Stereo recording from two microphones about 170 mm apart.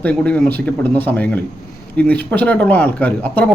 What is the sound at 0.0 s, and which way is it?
Speech, 10° left (ahead or behind).